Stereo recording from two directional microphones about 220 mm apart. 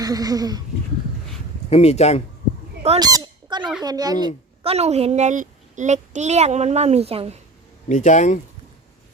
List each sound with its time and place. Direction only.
0.0 s speech: 15° right (ahead or behind)
1.7 s speech: 30° left (ahead or behind)
3.0 s squawk: 15° right (ahead or behind)
3.8 s speech: 15° right (ahead or behind)
4.6 s a woman's voice: 30° right (ahead or behind)
7.9 s speech: 35° left (ahead or behind)